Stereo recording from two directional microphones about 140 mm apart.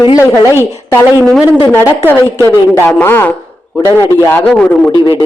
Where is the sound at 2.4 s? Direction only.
15° left (ahead or behind).